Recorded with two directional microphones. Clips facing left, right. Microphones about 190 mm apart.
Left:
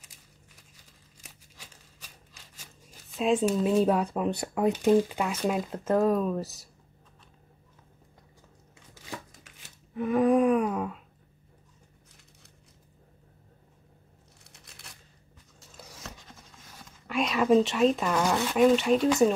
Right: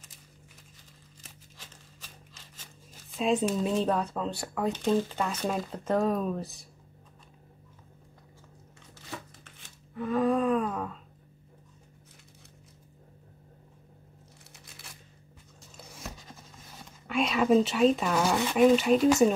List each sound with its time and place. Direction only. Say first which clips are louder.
1.2 s a sound: left 1 dB; 10° left (ahead or behind)
2.5 s speech: left 1 dB; 5° left (ahead or behind)
9.9 s speech: left 4 dB; 15° left (ahead or behind)
17.1 s speech: left 1 dB; centre (ahead or behind)